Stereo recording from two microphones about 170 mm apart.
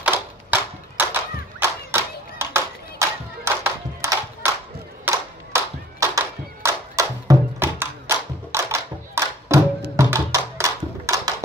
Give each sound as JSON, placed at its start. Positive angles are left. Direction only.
{"t": 0.0, "sound": "a sound", "side_deg": -10}
{"t": 5.0, "sound": "clapping", "side_deg": -15}
{"t": 9.9, "sound": "music", "side_deg": -15}